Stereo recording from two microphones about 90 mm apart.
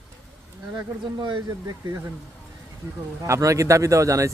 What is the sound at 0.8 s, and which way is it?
Speech, 60° right (ahead or behind).